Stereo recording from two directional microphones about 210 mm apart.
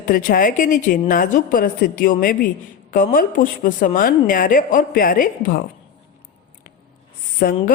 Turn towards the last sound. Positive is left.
turn(degrees=45)  # may be behind; listen again after turning